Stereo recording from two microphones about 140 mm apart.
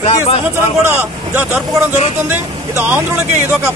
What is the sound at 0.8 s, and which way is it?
Speech, 15° right (ahead or behind).